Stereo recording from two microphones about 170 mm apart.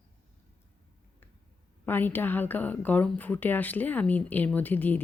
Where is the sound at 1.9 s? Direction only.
10° left (ahead or behind).